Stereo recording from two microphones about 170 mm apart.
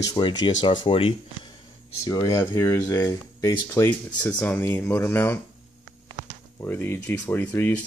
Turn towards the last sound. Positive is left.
turn(degrees=10)  # may be behind; listen again after turning